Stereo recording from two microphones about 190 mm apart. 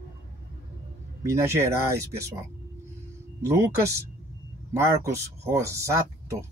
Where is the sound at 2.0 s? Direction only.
15° right (ahead or behind).